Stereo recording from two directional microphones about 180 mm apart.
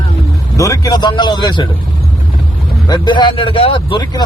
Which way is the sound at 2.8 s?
25° left (ahead or behind).